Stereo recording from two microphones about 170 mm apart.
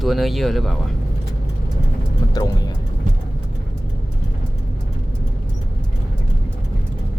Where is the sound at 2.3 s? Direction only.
20° left (ahead or behind).